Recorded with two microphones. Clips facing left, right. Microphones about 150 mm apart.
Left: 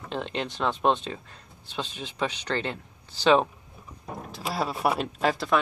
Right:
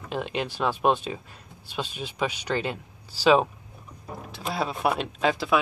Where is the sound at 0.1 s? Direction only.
5° right (ahead or behind).